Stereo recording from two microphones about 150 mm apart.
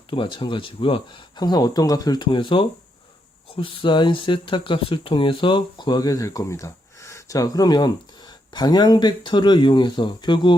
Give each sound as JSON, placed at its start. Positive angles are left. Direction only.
{"t": 0.1, "sound": "speech", "side_deg": 35}